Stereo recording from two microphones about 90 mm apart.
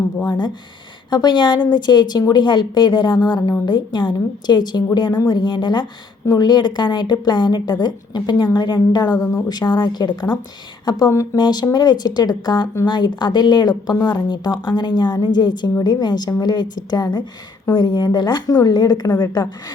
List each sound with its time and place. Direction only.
0.3 s a woman's voice: 50° left (ahead or behind)
9.6 s a woman's voice: 55° left (ahead or behind)
11.1 s speech: 35° left (ahead or behind)
11.3 s a woman's voice: 50° left (ahead or behind)